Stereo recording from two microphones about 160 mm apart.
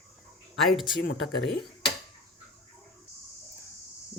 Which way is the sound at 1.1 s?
Centre (ahead or behind).